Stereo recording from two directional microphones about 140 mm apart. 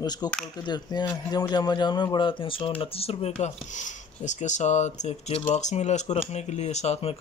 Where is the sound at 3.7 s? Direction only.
60° left (ahead or behind).